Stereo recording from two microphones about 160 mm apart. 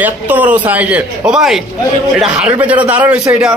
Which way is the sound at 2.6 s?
10° right (ahead or behind).